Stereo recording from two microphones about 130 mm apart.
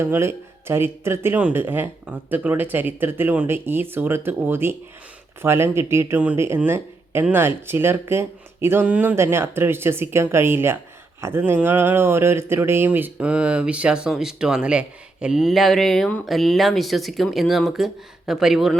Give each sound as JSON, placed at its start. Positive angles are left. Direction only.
{"t": 0.0, "sound": "speech", "side_deg": -20}